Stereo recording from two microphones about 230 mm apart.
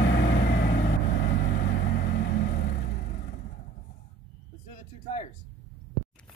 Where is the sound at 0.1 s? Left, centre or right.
Left.